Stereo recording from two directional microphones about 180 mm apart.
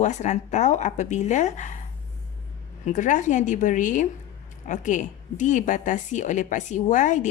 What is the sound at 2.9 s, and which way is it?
A woman's voice, 45° left (ahead or behind).